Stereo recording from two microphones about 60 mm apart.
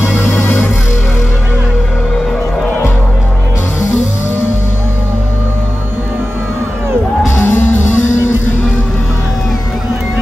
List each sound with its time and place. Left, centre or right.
7.3 s music: left